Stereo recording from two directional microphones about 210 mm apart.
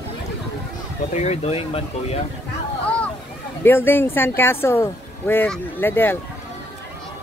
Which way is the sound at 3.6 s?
10° left (ahead or behind).